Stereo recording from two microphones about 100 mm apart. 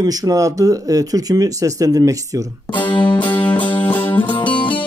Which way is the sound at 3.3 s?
15° left (ahead or behind).